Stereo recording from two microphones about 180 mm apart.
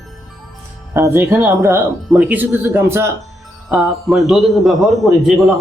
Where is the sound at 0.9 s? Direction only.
10° right (ahead or behind).